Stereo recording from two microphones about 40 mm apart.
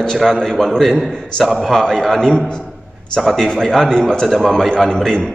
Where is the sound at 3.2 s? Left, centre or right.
Centre.